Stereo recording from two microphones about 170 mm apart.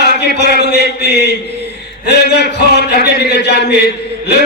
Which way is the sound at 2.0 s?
80° left.